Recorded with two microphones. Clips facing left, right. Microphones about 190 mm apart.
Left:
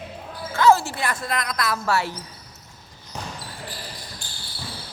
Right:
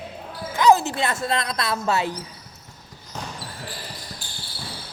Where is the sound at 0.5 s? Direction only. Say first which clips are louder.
Right 1 dB; 15° right (ahead or behind).